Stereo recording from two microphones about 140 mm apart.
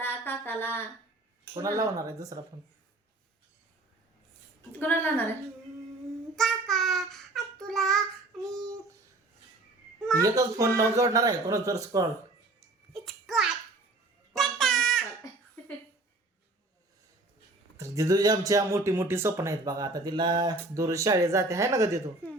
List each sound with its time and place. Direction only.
0.0 s a sound: 15° left (ahead or behind)
1.5 s speech: 25° right (ahead or behind)
4.7 s a woman's voice: 15° left (ahead or behind)
6.3 s child singing: centre (ahead or behind)
8.3 s speech: 5° left (ahead or behind)
10.2 s speech: 25° right (ahead or behind)
12.9 s a sound: centre (ahead or behind)
15.6 s a sound: 15° left (ahead or behind)
17.7 s speech: 20° right (ahead or behind)